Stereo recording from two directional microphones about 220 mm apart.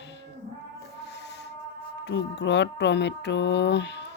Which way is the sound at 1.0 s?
50° left (ahead or behind).